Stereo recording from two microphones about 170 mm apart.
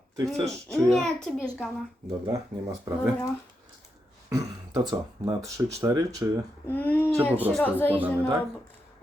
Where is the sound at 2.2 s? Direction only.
20° right (ahead or behind).